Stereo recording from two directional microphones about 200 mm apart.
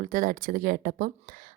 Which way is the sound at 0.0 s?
40° right (ahead or behind).